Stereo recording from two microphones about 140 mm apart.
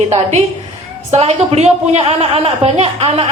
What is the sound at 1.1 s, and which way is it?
A woman's voice, 50° right (ahead or behind).